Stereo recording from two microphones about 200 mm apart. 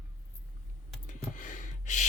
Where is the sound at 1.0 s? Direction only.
40° left (ahead or behind).